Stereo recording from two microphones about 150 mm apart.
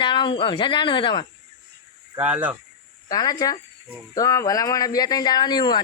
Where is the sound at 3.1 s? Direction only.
25° left (ahead or behind).